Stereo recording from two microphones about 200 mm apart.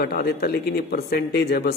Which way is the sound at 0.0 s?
50° left (ahead or behind).